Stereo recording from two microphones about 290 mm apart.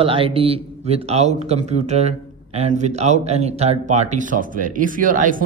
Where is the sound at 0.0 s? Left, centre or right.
Centre.